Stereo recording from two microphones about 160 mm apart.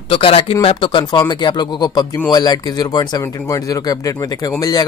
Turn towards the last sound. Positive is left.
turn(degrees=25)  # may be behind; listen again after turning